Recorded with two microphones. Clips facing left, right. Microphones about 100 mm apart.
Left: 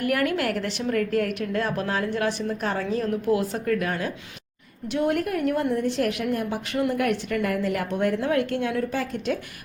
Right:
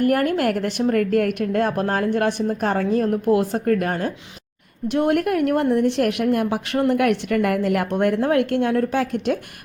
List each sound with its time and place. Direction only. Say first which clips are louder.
0.0 s a woman's voice: right 5 dB; 40° right (ahead or behind)
4.9 s a woman's voice: right 5 dB; 55° right (ahead or behind)